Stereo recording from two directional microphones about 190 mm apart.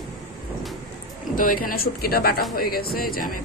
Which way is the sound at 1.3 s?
45° left (ahead or behind).